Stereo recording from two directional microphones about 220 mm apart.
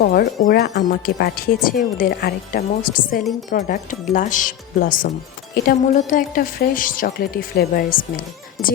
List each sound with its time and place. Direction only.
0.0 s speech: 40° left (ahead or behind)
8.6 s speech: centre (ahead or behind)